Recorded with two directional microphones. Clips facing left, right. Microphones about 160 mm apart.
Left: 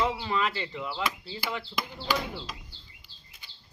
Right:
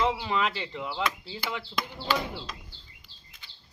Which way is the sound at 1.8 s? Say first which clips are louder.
Right 2 dB; 5° left (ahead or behind).